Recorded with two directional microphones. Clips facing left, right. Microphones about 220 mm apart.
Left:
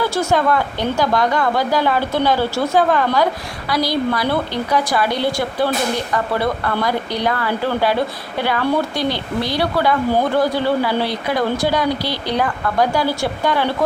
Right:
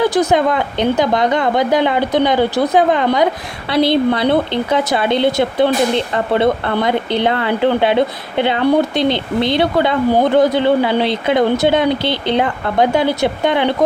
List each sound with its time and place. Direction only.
0.0 s speech: 20° right (ahead or behind)